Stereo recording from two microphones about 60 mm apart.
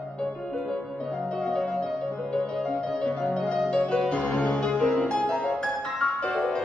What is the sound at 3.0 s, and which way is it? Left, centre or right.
Music, centre.